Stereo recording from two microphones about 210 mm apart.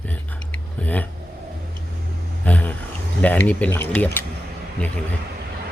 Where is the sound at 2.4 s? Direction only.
5° left (ahead or behind).